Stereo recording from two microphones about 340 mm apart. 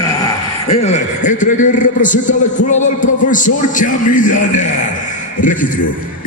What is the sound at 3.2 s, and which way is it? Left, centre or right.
A man's voice, left.